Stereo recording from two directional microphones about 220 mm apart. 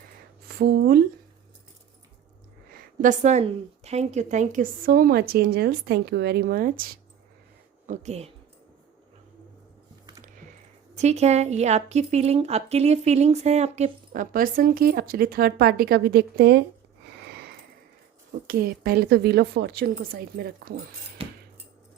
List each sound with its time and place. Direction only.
0.4 s speech: 45° right (ahead or behind)
3.0 s speech: 35° right (ahead or behind)
7.9 s speech: 30° right (ahead or behind)
10.9 s speech: 30° right (ahead or behind); by 16.6 s 50° right (ahead or behind)
17.2 s a sound: 45° right (ahead or behind)
18.4 s a woman's voice: 40° right (ahead or behind)
21.2 s a sound: 25° right (ahead or behind)